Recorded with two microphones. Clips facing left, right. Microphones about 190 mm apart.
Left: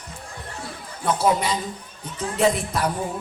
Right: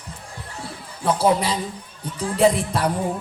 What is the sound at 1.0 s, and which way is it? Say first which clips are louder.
Speech: right 2 dB; 30° right (ahead or behind).